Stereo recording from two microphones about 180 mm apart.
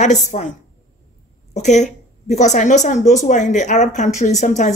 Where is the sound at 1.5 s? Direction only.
40° left (ahead or behind).